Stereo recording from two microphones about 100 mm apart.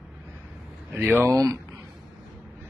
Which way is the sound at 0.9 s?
20° right (ahead or behind).